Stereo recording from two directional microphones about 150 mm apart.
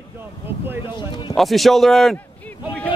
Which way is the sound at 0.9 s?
30° left (ahead or behind).